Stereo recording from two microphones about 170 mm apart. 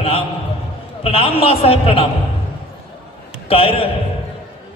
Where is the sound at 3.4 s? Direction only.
35° left (ahead or behind).